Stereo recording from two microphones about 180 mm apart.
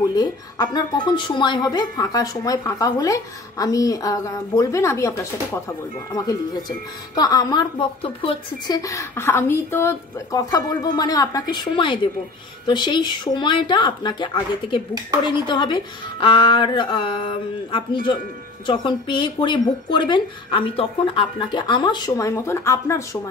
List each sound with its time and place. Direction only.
0.1 s a woman's voice: 20° left (ahead or behind)